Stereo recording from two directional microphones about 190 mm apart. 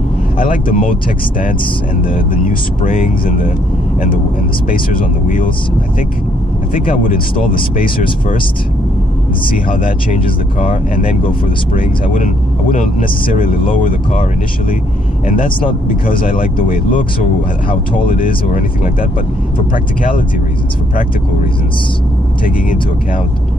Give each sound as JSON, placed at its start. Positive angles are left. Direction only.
{"t": 0.4, "sound": "speech", "side_deg": 45}
{"t": 2.1, "sound": "speech", "side_deg": 45}
{"t": 10.6, "sound": "speech", "side_deg": 45}
{"t": 13.3, "sound": "speech", "side_deg": 45}
{"t": 15.2, "sound": "speech", "side_deg": 45}
{"t": 19.7, "sound": "speech", "side_deg": 45}